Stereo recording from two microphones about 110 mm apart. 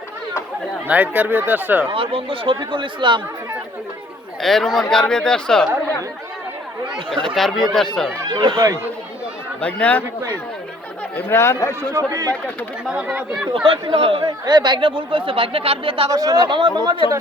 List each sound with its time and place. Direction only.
0.9 s speech: 15° right (ahead or behind)
1.9 s speech: 55° right (ahead or behind)
4.4 s speech: centre (ahead or behind)
7.3 s speech: centre (ahead or behind)
8.3 s speech: 45° right (ahead or behind)
9.6 s speech: 10° left (ahead or behind)
11.1 s speech: 20° left (ahead or behind)
11.9 s speech: 35° right (ahead or behind)
12.9 s speech: 10° right (ahead or behind)
13.5 s speech: 55° right (ahead or behind)
14.3 s speech: 40° right (ahead or behind)
16.0 s speech: 30° right (ahead or behind)
16.5 s speech: 45° right (ahead or behind)